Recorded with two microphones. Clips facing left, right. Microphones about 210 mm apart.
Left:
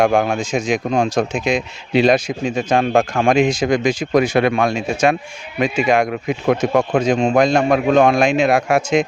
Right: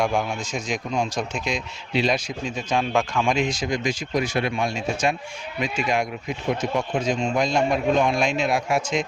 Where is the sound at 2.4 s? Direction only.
80° left.